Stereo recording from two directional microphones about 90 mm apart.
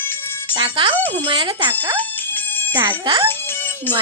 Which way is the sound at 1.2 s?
70° right (ahead or behind).